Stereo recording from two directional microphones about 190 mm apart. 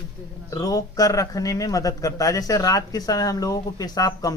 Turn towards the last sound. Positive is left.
turn(degrees=20)  # may be behind; listen again after turning